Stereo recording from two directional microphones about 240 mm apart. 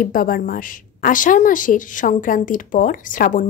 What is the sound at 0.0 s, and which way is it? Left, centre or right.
A woman's voice, left.